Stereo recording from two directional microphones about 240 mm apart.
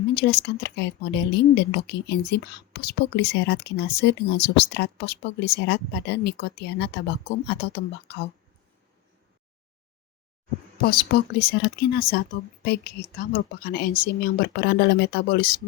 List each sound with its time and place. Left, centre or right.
0.1 s speech: left
10.8 s speech: left